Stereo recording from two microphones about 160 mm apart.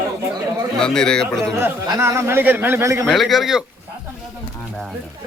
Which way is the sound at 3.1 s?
Centre (ahead or behind).